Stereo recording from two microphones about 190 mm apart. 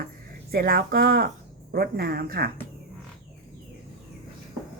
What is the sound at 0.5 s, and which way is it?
Speech, 55° right (ahead or behind).